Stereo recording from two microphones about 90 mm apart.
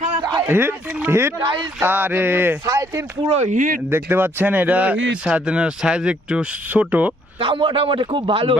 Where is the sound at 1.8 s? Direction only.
20° right (ahead or behind).